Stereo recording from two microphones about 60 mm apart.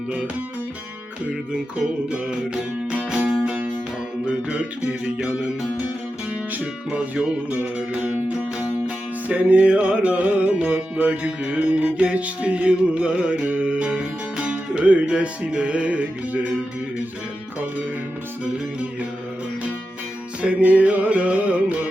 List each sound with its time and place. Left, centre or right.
1.3 s music: centre
4.4 s music: centre
6.5 s music: right
9.3 s music: right
20.4 s music: right